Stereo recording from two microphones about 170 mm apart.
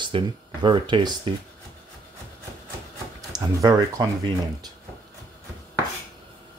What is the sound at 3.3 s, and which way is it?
Speech, 20° right (ahead or behind).